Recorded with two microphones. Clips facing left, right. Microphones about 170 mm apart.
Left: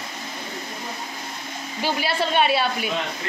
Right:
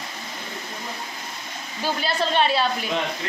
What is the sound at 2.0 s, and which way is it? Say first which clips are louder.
Speech: even; 5° left (ahead or behind).